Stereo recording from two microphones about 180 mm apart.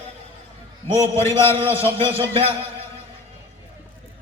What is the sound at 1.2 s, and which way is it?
Speech, 15° left (ahead or behind).